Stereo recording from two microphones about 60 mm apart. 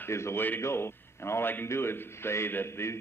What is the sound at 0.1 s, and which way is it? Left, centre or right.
A man's voice, left.